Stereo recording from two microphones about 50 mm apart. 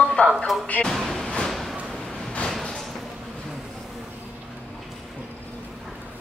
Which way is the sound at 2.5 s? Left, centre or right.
Centre.